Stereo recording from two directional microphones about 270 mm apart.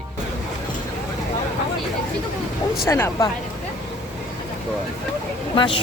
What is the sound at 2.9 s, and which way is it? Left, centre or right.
Speech, centre.